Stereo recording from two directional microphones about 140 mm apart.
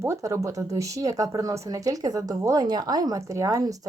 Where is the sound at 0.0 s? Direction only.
20° right (ahead or behind).